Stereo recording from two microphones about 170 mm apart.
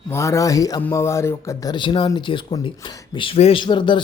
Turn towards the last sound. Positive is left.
turn(degrees=30)  # may be behind; listen again after turning